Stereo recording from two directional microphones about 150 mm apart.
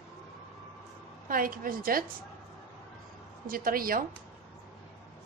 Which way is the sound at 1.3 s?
70° right (ahead or behind).